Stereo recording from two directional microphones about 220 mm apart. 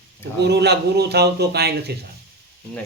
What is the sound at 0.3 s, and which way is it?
A man's voice, 50° right (ahead or behind).